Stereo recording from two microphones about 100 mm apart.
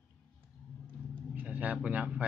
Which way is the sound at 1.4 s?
15° right (ahead or behind).